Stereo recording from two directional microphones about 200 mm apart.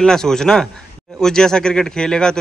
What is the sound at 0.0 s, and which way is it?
Speech, 5° left (ahead or behind).